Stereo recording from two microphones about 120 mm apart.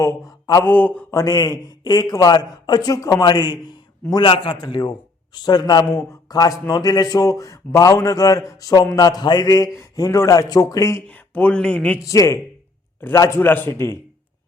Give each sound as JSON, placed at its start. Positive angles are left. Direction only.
{"t": 0.0, "sound": "mantra", "side_deg": 30}
{"t": 0.6, "sound": "speech", "side_deg": 15}
{"t": 1.1, "sound": "a man's voice", "side_deg": 30}
{"t": 11.1, "sound": "speech", "side_deg": 15}
{"t": 11.9, "sound": "speech", "side_deg": 25}